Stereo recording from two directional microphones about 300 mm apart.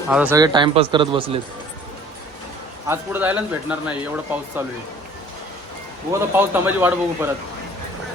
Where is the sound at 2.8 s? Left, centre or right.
Centre.